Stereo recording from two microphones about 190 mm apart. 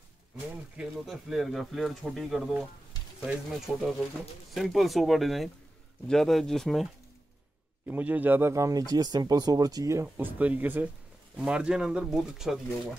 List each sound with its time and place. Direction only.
0.7 s speech: centre (ahead or behind)
7.9 s speech: 10° right (ahead or behind)